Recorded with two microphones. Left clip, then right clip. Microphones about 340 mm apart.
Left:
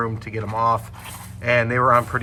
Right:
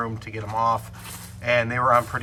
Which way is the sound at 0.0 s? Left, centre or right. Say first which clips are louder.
Left 4 dB; centre.